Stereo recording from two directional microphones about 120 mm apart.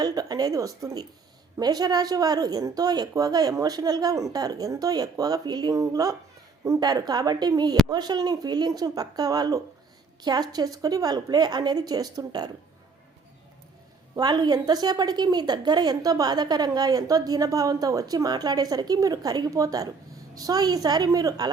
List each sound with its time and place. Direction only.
0.0 s a woman's voice: 35° right (ahead or behind)
14.2 s a woman's voice: 35° right (ahead or behind)